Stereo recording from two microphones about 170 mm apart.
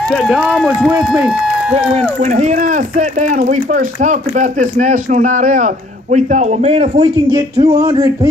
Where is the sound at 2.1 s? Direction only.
45° right (ahead or behind).